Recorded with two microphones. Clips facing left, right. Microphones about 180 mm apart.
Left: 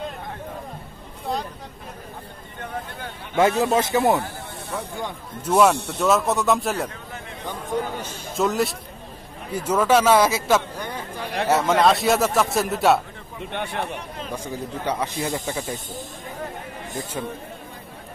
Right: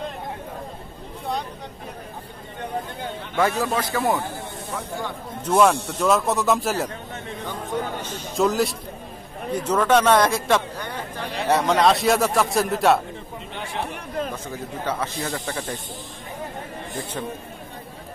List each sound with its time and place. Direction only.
3.3 s speech: 20° left (ahead or behind)
5.4 s a man's voice: 5° left (ahead or behind)
8.0 s a man's voice: 5° left (ahead or behind)
13.5 s speech: 60° left (ahead or behind)
13.9 s speech: 55° right (ahead or behind)
14.3 s speech: 15° left (ahead or behind)